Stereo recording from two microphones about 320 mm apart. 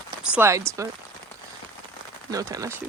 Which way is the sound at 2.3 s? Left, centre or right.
Centre.